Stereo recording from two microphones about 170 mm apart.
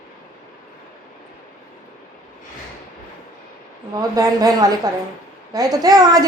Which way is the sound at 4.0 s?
20° right (ahead or behind).